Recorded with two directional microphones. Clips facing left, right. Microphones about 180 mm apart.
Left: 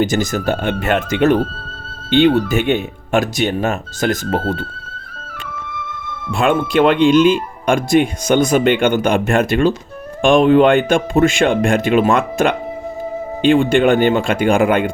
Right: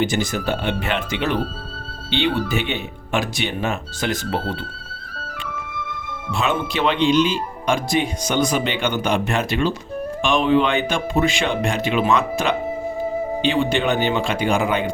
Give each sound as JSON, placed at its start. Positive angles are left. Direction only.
{"t": 0.0, "sound": "speech", "side_deg": 45}
{"t": 6.3, "sound": "speech", "side_deg": 50}